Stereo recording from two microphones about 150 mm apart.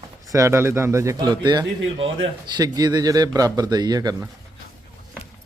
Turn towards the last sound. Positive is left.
turn(degrees=-25)  # may be behind; listen again after turning